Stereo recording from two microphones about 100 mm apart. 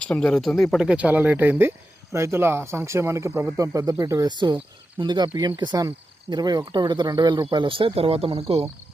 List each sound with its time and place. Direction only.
0.0 s speech: 10° left (ahead or behind)
0.8 s speech: 10° right (ahead or behind); by 8.6 s 85° right